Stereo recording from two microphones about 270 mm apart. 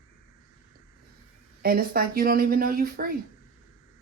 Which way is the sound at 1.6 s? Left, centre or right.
Right.